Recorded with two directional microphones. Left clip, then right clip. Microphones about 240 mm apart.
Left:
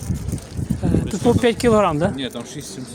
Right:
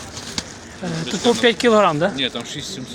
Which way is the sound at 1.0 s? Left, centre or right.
Centre.